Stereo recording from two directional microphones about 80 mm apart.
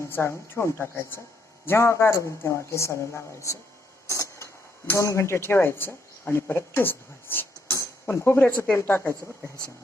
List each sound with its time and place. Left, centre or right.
0.1 s a woman's voice: left
4.1 s a sound: left
4.9 s speech: left
8.4 s a woman's voice: centre